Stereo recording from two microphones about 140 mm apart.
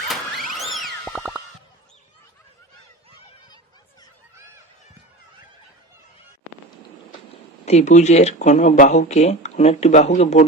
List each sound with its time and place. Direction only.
0.1 s music: centre (ahead or behind)
7.6 s speech: 50° left (ahead or behind)